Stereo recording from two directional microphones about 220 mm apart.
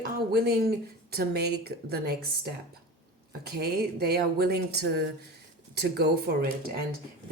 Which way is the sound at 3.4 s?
45° right (ahead or behind).